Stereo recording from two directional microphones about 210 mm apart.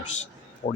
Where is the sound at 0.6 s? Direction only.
25° left (ahead or behind).